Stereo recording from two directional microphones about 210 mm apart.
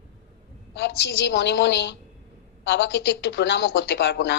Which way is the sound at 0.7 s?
55° left (ahead or behind).